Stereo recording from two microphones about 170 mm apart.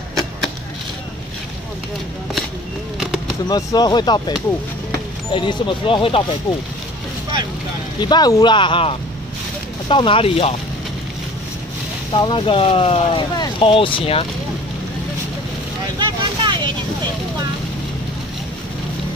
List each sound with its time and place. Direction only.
3.4 s speech: 25° left (ahead or behind)
8.0 s speech: 25° left (ahead or behind)
12.1 s speech: 30° left (ahead or behind)
16.0 s vehicle: 25° right (ahead or behind)